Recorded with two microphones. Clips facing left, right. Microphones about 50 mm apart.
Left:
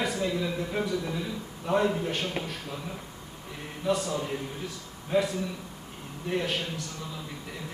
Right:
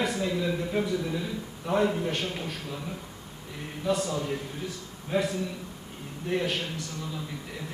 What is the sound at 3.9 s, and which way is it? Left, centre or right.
A man's voice, centre.